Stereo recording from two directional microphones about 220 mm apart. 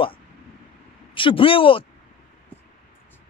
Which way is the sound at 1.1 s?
25° left (ahead or behind).